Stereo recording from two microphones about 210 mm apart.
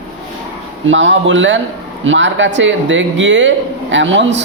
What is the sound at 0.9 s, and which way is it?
A man's voice, 60° right (ahead or behind).